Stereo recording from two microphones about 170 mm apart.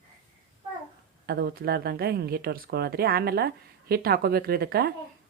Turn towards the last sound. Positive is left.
turn(degrees=-65)  # may be behind; listen again after turning